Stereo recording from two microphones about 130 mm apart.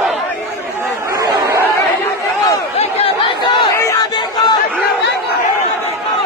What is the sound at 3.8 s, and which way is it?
Crowd, 25° left (ahead or behind).